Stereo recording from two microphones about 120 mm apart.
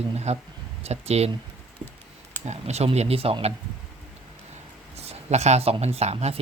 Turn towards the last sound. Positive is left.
turn(degrees=-60)  # may be behind; listen again after turning